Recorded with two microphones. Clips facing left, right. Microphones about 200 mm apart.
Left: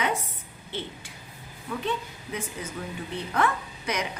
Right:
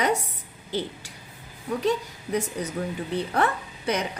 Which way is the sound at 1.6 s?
40° right (ahead or behind).